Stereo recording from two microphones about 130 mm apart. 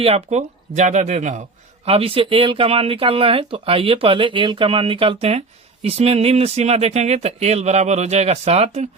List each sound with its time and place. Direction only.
0.0 s speech: 55° right (ahead or behind)
1.8 s speech: 50° right (ahead or behind)